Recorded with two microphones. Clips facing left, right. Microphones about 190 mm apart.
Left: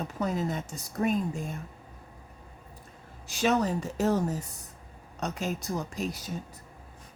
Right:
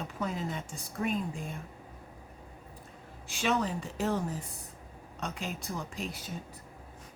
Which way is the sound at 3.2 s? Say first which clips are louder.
Left 4 dB; 40° left (ahead or behind).